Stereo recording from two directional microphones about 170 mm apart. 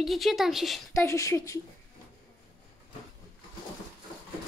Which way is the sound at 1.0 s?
15° left (ahead or behind).